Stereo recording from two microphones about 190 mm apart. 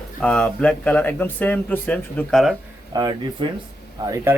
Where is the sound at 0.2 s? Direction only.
5° left (ahead or behind).